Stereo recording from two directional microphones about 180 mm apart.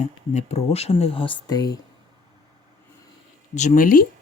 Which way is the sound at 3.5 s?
40° left (ahead or behind).